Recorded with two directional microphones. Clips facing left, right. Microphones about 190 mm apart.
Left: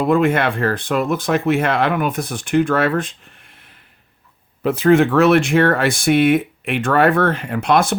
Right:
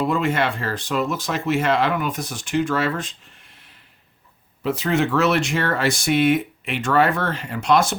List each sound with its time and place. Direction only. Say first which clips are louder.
0.1 s speech: left 6 dB; 55° left (ahead or behind)
4.6 s speech: left 8 dB; 55° left (ahead or behind)